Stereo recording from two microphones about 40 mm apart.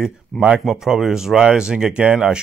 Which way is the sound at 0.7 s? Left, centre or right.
Centre.